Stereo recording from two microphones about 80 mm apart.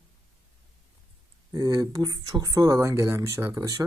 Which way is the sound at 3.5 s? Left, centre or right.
Right.